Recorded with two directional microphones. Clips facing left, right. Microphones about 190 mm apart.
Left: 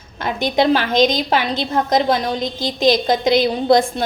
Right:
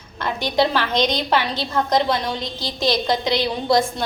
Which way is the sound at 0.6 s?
45° left (ahead or behind).